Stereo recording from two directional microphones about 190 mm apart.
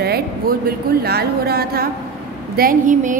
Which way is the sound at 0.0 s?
55° right (ahead or behind).